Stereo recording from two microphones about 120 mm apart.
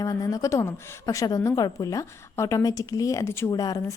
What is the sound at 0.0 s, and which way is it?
A woman's voice, 30° left (ahead or behind).